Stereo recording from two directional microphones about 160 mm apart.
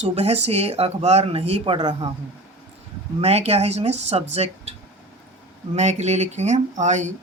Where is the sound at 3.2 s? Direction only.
40° right (ahead or behind).